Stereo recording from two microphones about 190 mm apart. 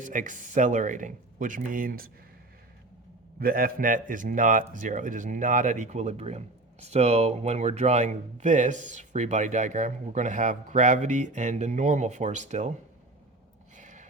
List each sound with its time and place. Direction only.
0.0 s speech: 40° right (ahead or behind)
3.4 s speech: 50° right (ahead or behind)
13.7 s a sound: 40° right (ahead or behind)